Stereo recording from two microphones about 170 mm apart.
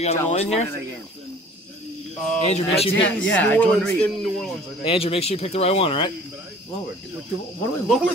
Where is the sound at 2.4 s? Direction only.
35° left (ahead or behind).